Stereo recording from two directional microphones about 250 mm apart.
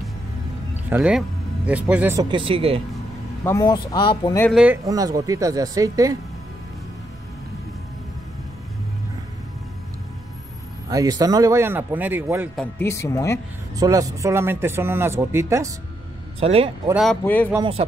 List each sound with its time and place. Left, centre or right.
0.8 s speech: centre; by 2.8 s right
3.4 s speech: centre
4.5 s speech: centre
4.8 s speech: centre
10.9 s speech: centre
12.7 s speech: centre
13.7 s speech: centre
16.3 s a man's voice: right
16.9 s speech: centre